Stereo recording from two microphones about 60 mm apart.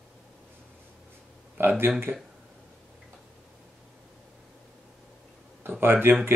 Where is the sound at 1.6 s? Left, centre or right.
Right.